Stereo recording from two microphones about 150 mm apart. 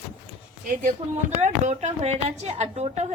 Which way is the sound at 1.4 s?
50° right (ahead or behind).